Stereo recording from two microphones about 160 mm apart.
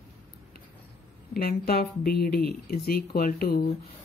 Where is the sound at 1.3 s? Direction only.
75° left (ahead or behind).